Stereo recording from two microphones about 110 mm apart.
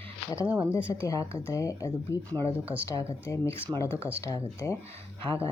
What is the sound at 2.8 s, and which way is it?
Speech, 25° left (ahead or behind).